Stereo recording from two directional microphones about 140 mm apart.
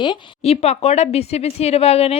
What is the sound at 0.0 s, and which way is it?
A woman's voice, 40° left (ahead or behind).